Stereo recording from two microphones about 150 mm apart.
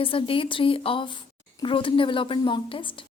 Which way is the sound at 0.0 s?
35° left (ahead or behind).